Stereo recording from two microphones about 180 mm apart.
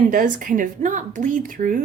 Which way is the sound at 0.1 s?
50° right (ahead or behind).